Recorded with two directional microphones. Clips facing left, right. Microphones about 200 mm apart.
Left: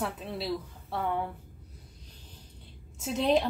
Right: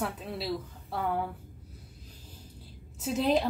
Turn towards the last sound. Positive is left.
turn(degrees=0)  # may be behind; listen again after turning